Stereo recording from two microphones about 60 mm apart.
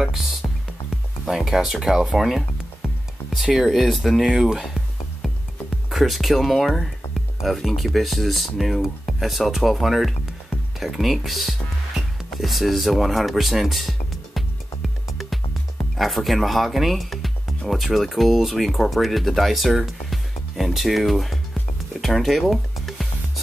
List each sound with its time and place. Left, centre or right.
0.0 s music: centre
1.3 s speech: centre
5.2 s music: centre
5.9 s speech: centre
16.0 s speech: centre
22.0 s music: centre